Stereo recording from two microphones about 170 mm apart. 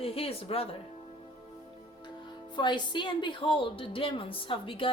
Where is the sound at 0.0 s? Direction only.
35° left (ahead or behind).